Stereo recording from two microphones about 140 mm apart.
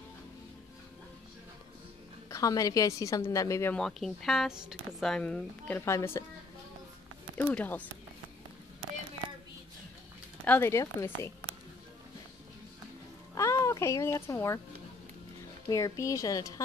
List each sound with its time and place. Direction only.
2.2 s a woman's voice: 25° left (ahead or behind)
3.7 s speech: 5° left (ahead or behind); by 6.2 s 20° left (ahead or behind)
7.3 s speech: 10° left (ahead or behind)
10.4 s speech: 15° left (ahead or behind)
13.3 s music: 20° left (ahead or behind)
15.7 s a woman's voice: 25° left (ahead or behind)